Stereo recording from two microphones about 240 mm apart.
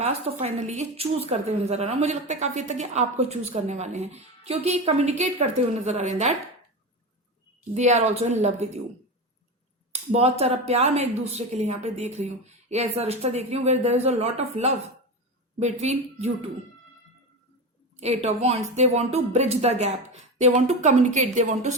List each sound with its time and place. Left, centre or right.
0.0 s a woman's voice: right
7.7 s a woman's voice: right
9.9 s a woman's voice: right
17.9 s a woman's voice: right